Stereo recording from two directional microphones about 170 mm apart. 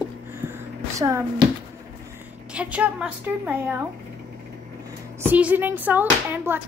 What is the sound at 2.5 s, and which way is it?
Speech, 5° right (ahead or behind).